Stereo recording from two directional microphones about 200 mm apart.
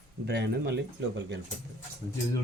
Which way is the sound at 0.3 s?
55° right (ahead or behind).